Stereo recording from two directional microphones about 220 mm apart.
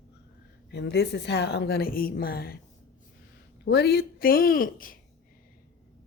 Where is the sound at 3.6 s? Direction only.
50° left (ahead or behind).